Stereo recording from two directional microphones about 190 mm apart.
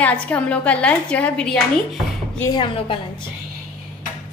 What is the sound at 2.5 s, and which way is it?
Speech, 25° left (ahead or behind).